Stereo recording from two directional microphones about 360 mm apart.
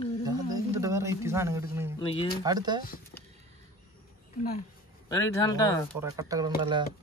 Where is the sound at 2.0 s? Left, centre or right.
Centre.